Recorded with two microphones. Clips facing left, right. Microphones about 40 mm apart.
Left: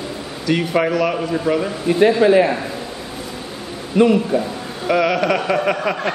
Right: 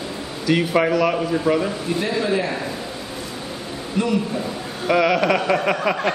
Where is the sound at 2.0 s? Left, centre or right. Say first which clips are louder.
Left 11 dB; left.